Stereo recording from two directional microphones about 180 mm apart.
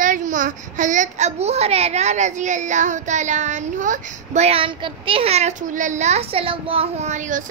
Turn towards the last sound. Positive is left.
turn(degrees=-45)  # may be behind; listen again after turning